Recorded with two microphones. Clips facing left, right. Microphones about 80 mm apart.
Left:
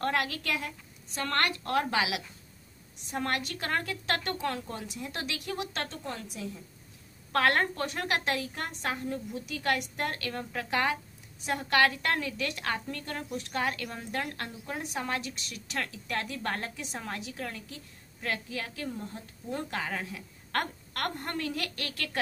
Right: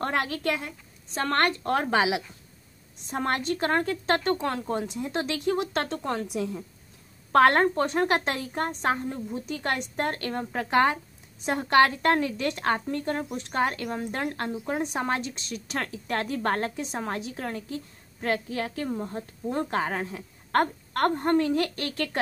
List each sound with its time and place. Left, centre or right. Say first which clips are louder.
0.0 s a woman's voice: right 3 dB; right
5.9 s speech: right 9 dB; right
7.3 s a woman's voice: right 7 dB; right